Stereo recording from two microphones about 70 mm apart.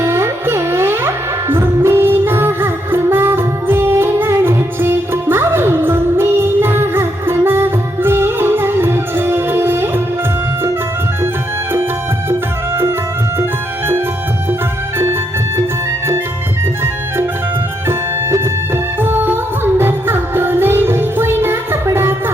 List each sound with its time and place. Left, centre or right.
0.0 s music: right
12.3 s music: right
17.8 s music: right